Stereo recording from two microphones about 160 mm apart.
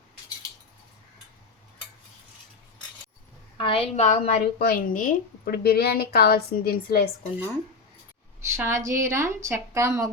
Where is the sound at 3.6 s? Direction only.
35° left (ahead or behind).